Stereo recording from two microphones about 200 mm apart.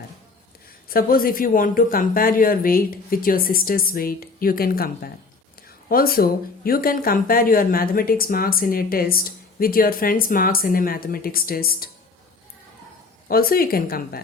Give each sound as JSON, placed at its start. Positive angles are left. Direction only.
{"t": 0.9, "sound": "speech", "side_deg": 45}
{"t": 13.2, "sound": "speech", "side_deg": 45}